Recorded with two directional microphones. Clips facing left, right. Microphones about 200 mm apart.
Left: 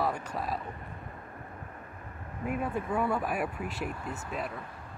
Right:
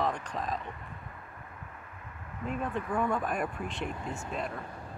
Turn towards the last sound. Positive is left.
turn(degrees=0)  # may be behind; listen again after turning